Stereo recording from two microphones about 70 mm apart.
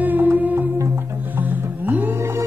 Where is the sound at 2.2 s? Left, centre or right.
Right.